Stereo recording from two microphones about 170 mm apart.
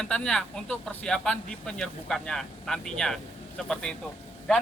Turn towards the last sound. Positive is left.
turn(degrees=5)  # may be behind; listen again after turning